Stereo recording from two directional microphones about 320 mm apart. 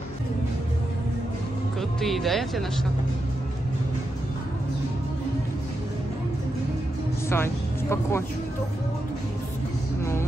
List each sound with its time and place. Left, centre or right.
1.8 s speech: centre
7.2 s speech: centre